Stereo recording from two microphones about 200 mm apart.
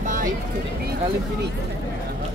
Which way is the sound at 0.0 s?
40° right (ahead or behind).